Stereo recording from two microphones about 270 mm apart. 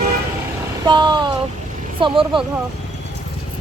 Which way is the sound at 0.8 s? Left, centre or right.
Centre.